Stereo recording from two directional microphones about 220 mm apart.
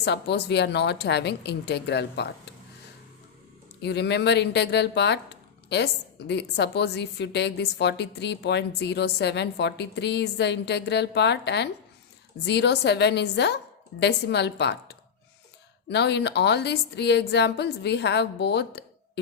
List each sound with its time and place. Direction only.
0.0 s speech: 50° left (ahead or behind)
3.8 s speech: 50° left (ahead or behind)